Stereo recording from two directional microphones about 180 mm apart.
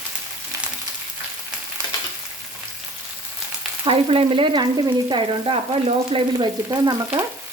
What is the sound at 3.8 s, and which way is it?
Frying, 30° right (ahead or behind).